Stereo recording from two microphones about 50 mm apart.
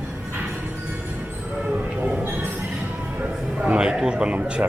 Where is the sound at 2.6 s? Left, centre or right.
Centre.